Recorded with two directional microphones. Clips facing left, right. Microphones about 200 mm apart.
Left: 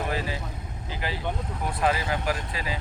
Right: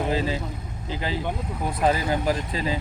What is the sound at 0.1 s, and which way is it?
Speech, 20° right (ahead or behind).